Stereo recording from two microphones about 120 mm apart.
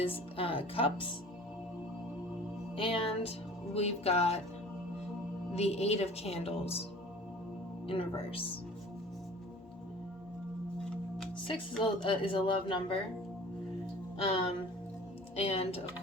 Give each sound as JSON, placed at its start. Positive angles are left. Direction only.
{"t": 0.0, "sound": "speech", "side_deg": 50}
{"t": 2.7, "sound": "a woman's voice", "side_deg": 50}
{"t": 5.5, "sound": "a woman's voice", "side_deg": 60}
{"t": 7.9, "sound": "speech", "side_deg": 50}
{"t": 12.0, "sound": "speech", "side_deg": 45}
{"t": 14.2, "sound": "a woman's voice", "side_deg": 50}